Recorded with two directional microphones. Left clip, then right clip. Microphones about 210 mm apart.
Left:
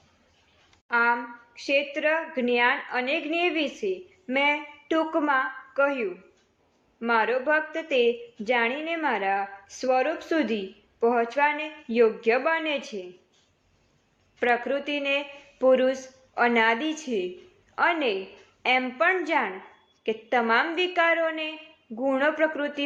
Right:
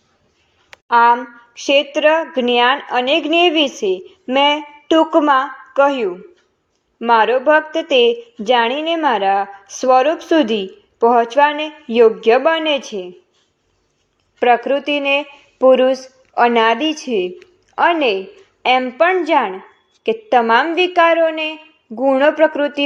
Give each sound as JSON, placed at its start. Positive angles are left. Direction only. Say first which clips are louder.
{"t": 0.9, "sound": "a woman's voice", "louder": "right 12 dB", "side_deg": -25}
{"t": 14.3, "sound": "a woman's voice", "louder": "right 11 dB", "side_deg": -25}